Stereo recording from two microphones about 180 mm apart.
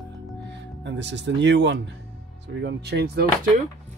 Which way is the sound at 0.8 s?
80° right.